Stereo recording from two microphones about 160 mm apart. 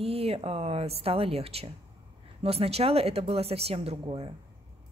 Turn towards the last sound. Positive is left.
turn(degrees=-35)  # may be behind; listen again after turning